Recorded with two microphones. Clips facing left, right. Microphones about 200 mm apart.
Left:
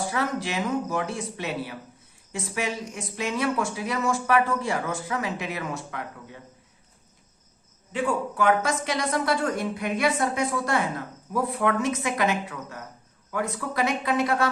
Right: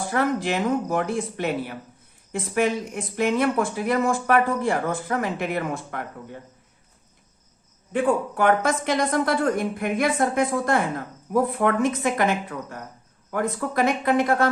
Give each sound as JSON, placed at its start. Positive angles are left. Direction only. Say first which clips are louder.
{"t": 0.0, "sound": "a woman's voice", "louder": "right 4 dB", "side_deg": -50}
{"t": 7.9, "sound": "a woman's voice", "louder": "right 4 dB", "side_deg": -55}